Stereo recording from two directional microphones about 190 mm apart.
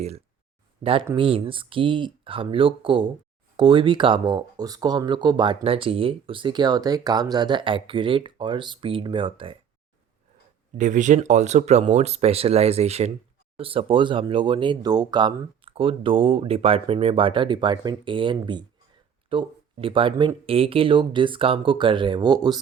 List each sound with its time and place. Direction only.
0.8 s speech: 30° right (ahead or behind)
10.8 s speech: 40° right (ahead or behind); by 22.6 s 20° right (ahead or behind)